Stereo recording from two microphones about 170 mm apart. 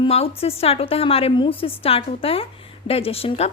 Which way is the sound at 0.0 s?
35° left (ahead or behind).